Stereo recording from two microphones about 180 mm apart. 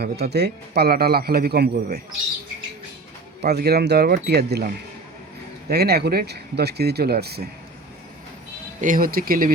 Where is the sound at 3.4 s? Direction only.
65° right (ahead or behind).